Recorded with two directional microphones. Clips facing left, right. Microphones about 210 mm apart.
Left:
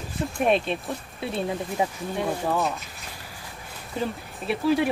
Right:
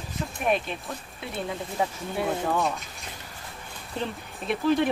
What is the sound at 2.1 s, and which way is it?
Speech, centre (ahead or behind).